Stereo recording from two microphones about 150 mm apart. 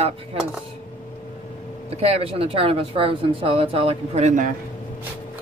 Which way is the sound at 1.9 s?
45° right (ahead or behind).